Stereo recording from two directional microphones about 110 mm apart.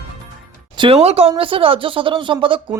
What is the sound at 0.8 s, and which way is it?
Speech, 60° right (ahead or behind).